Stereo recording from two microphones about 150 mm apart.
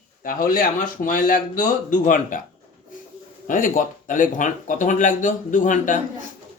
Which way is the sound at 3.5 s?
65° left (ahead or behind).